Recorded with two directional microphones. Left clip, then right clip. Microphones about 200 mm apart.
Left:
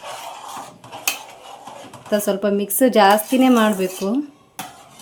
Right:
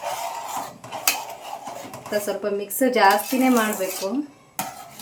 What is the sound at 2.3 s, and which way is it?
Speech, 60° left (ahead or behind).